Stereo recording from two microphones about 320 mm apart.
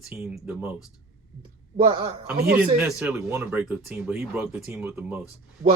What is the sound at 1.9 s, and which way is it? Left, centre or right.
Speech, centre.